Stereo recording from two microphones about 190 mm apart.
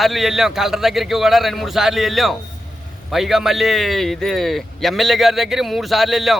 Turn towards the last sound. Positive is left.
turn(degrees=0)  # may be behind; listen again after turning